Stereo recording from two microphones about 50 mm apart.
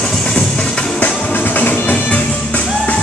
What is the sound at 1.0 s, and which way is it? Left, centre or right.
Music, left.